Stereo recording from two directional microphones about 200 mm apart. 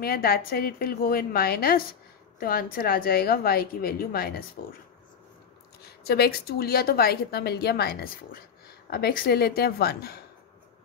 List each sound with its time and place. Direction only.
0.0 s speech: 50° left (ahead or behind)
6.0 s speech: 50° left (ahead or behind)